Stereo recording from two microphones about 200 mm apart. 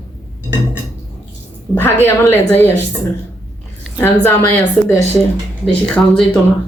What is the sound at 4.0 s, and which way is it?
A woman's voice, 10° left (ahead or behind).